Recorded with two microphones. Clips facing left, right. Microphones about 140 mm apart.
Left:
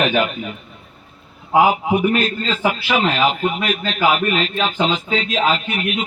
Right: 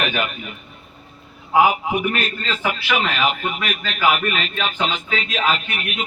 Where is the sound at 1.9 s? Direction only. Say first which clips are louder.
Left 5 dB; 30° left (ahead or behind).